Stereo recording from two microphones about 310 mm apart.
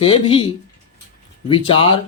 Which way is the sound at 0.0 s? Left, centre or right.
Centre.